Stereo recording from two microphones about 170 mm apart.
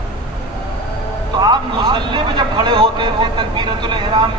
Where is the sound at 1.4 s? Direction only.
25° right (ahead or behind).